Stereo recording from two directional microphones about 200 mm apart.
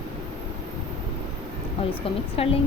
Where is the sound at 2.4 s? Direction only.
30° left (ahead or behind).